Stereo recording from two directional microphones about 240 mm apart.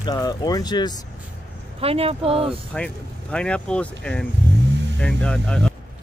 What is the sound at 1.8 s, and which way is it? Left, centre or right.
Speech, right.